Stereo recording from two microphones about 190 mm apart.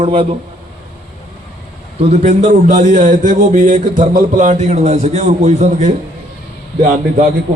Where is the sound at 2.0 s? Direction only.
35° right (ahead or behind).